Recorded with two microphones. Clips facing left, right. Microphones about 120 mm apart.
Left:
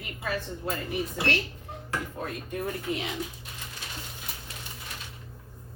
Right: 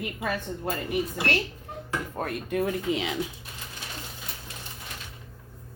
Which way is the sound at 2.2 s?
75° right (ahead or behind).